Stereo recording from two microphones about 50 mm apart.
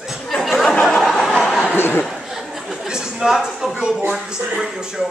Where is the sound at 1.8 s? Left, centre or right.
Left.